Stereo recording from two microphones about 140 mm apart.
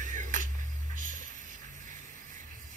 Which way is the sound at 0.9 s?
70° right (ahead or behind).